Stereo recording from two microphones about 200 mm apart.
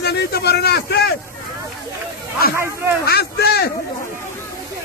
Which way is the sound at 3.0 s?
50° left (ahead or behind).